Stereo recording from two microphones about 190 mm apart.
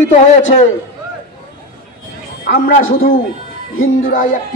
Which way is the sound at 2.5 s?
45° left (ahead or behind).